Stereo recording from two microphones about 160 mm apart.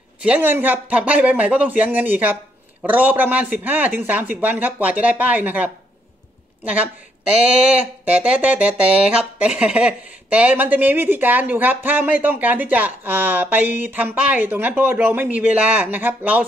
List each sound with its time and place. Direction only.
0.2 s speech: 10° right (ahead or behind)